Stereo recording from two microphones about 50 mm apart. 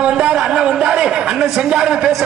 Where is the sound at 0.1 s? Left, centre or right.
Centre.